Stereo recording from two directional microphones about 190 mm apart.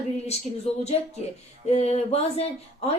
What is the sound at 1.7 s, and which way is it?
Speech, 35° left (ahead or behind).